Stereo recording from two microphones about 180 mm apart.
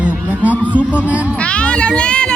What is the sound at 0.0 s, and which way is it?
Music, 10° right (ahead or behind).